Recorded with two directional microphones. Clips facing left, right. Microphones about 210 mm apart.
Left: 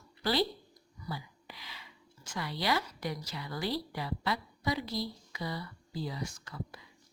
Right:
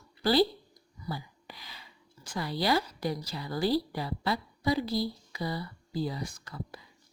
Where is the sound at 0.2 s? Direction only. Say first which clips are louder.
Right 6 dB; 35° right (ahead or behind).